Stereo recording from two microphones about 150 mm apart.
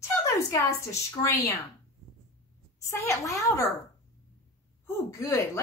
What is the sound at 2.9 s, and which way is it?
Speech, 20° left (ahead or behind).